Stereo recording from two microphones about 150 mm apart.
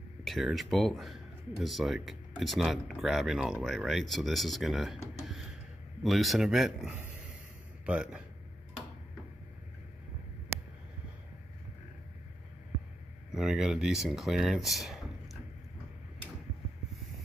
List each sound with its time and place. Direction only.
0.2 s speech: centre (ahead or behind)
13.3 s speech: 5° right (ahead or behind)